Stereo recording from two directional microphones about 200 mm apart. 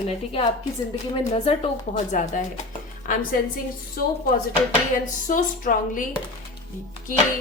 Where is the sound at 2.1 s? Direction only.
40° left (ahead or behind).